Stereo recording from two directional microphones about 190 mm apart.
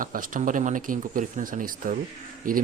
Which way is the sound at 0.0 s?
45° right (ahead or behind).